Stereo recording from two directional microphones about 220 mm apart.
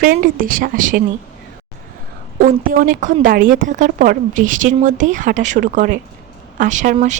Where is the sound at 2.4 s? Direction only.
40° right (ahead or behind).